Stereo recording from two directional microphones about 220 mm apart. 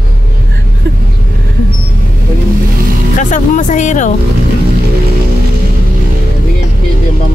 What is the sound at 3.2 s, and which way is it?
Speech, 35° left (ahead or behind).